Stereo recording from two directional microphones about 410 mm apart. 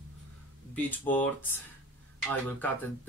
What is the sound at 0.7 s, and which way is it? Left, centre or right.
Speech, centre.